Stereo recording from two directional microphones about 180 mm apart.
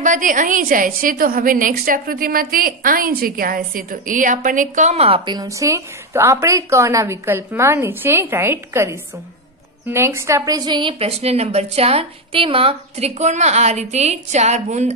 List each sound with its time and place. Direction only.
0.0 s a woman's voice: 45° right (ahead or behind)